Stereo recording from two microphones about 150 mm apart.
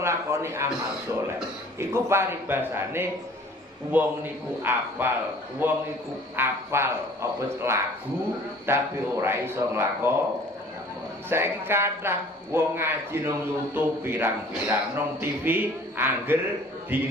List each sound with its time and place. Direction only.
0.0 s a man's voice: 20° right (ahead or behind)
1.8 s a man's voice: 15° right (ahead or behind)
11.2 s a man's voice: 15° right (ahead or behind)